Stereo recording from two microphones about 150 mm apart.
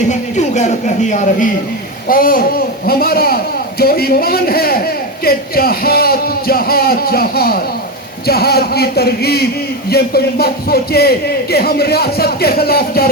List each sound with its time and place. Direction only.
0.1 s speech: 50° left (ahead or behind)
2.0 s a man's voice: 70° left (ahead or behind); by 13.1 s 90° left